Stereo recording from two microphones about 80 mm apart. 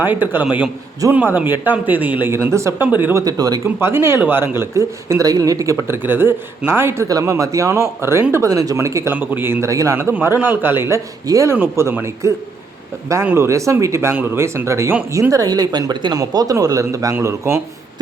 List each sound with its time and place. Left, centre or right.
0.0 s a man's voice: right
2.2 s speech: right
3.2 s speech: right
3.6 s speech: right
5.9 s a man's voice: right
7.1 s speech: right
9.1 s a man's voice: right
9.6 s a man's voice: right
11.3 s speech: right
15.3 s speech: right
16.1 s speech: right